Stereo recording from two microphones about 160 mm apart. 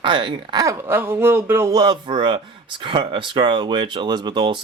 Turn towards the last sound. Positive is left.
turn(degrees=-30)  # may be behind; listen again after turning